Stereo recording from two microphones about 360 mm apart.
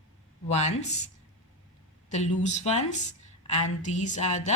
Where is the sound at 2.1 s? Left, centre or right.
Centre.